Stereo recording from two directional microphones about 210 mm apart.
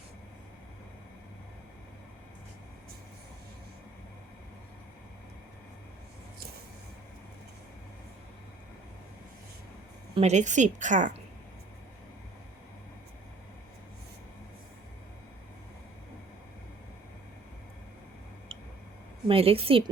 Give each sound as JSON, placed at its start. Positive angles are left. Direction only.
{"t": 10.2, "sound": "a woman's voice", "side_deg": -35}
{"t": 19.3, "sound": "a woman's voice", "side_deg": -25}